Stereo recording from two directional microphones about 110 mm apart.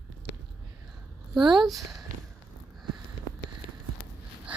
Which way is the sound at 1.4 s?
45° right (ahead or behind).